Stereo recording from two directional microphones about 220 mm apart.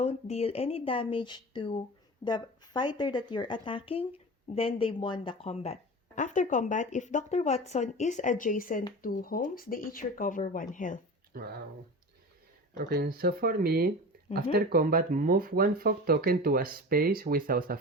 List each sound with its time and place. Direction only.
0.0 s a woman's voice: 30° left (ahead or behind)
11.3 s speech: 45° right (ahead or behind)
12.7 s speech: 45° right (ahead or behind)